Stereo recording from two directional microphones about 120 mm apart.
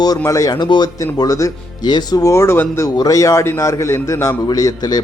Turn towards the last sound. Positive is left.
turn(degrees=30)  # may be behind; listen again after turning